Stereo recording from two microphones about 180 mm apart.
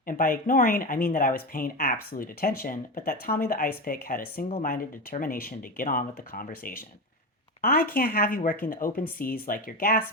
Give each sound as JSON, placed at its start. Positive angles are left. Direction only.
{"t": 0.0, "sound": "speech", "side_deg": 50}